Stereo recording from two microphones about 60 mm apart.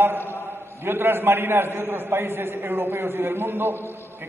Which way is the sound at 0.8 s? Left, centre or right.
Right.